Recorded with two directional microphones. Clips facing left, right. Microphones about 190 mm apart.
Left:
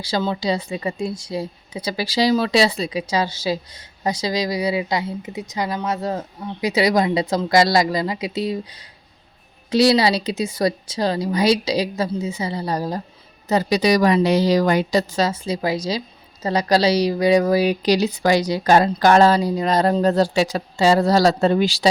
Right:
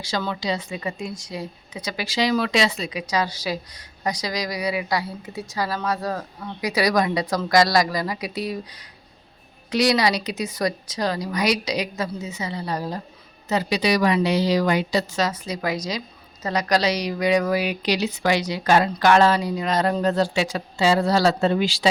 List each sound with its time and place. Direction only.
0.0 s a woman's voice: 30° left (ahead or behind)